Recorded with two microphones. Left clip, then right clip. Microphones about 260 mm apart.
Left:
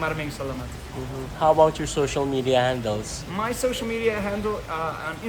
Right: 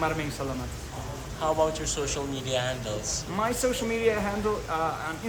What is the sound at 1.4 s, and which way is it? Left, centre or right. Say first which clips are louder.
Speech: left 8 dB; left.